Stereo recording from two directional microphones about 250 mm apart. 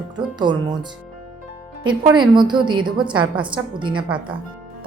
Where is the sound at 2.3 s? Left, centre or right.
Centre.